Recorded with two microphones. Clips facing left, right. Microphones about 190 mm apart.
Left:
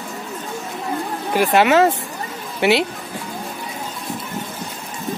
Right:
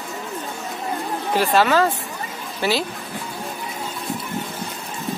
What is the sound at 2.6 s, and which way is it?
Speech, 65° left (ahead or behind).